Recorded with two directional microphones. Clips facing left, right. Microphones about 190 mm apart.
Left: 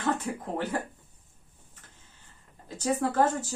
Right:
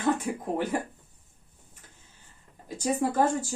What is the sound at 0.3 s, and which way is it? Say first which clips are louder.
Speech: right 3 dB; 15° right (ahead or behind).